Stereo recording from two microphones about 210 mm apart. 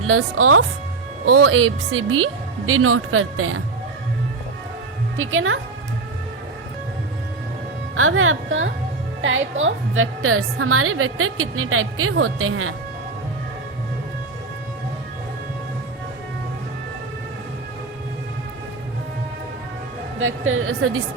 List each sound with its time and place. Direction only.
0.1 s a woman's voice: 90° right
5.1 s a woman's voice: 70° right (ahead or behind)
7.9 s a woman's voice: 75° right (ahead or behind)
20.1 s a woman's voice: 70° right (ahead or behind)